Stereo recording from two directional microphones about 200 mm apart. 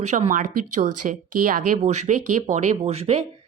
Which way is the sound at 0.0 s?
35° right (ahead or behind).